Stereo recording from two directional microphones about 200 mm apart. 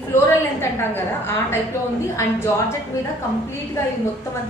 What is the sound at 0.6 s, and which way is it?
A woman's voice, 10° left (ahead or behind).